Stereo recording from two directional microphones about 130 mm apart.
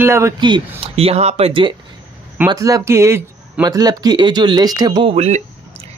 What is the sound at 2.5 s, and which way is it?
Speech, 25° right (ahead or behind).